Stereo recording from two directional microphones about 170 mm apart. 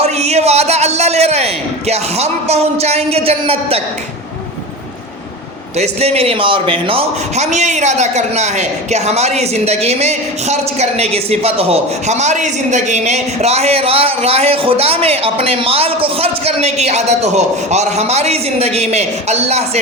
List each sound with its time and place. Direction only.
0.0 s a sound: 40° right (ahead or behind)
1.9 s a man's voice: 40° right (ahead or behind)
5.7 s a man's voice: 40° right (ahead or behind)